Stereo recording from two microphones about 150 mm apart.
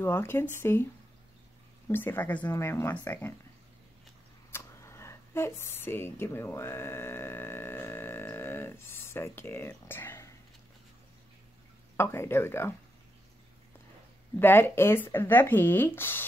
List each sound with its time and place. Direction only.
0.0 s speech: 15° left (ahead or behind)
1.9 s speech: 15° left (ahead or behind)
4.5 s a sound: 15° left (ahead or behind)
12.0 s speech: 15° left (ahead or behind)
14.4 s speech: 15° left (ahead or behind)